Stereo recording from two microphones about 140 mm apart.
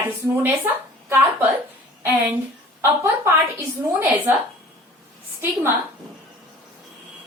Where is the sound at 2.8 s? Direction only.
15° right (ahead or behind).